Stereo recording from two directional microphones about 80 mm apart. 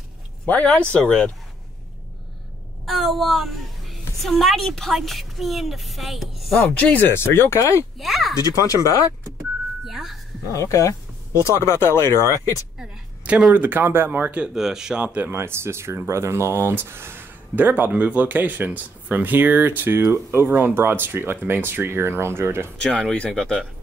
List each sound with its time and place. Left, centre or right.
0.5 s speech: centre
2.8 s a woman's voice: centre
6.8 s speech: left
8.0 s speech: centre
8.4 s speech: left
9.8 s music: centre
10.5 s speech: left
13.5 s speech: right
14.4 s speech: centre
15.3 s speech: right
22.8 s speech: centre